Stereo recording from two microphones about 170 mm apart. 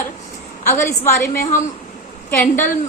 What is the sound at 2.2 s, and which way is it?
Speech, 10° left (ahead or behind).